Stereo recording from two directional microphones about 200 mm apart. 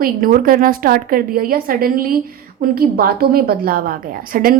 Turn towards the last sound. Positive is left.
turn(degrees=-45)  # may be behind; listen again after turning